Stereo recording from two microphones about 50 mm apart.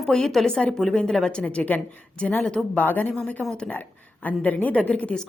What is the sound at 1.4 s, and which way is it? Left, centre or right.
A woman's voice, left.